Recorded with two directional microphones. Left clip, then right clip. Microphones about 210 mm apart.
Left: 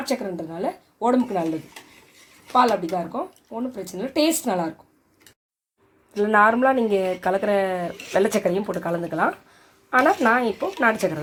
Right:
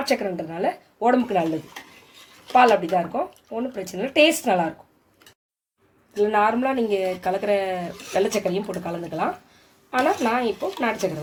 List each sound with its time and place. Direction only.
0.0 s a woman's voice: 5° right (ahead or behind)
2.5 s speech: 10° right (ahead or behind)
6.1 s speech: 15° left (ahead or behind)
10.2 s speech: 20° left (ahead or behind)